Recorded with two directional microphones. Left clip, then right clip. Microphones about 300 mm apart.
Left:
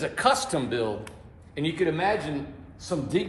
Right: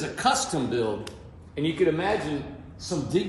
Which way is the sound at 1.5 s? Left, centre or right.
Left.